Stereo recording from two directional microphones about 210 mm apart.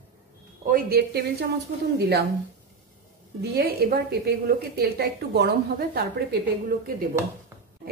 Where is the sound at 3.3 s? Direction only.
50° right (ahead or behind).